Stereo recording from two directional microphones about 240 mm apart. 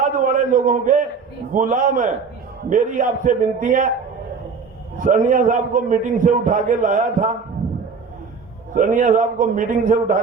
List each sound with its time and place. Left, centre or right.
0.0 s a man's voice: right
4.9 s a man's voice: right
8.7 s a man's voice: right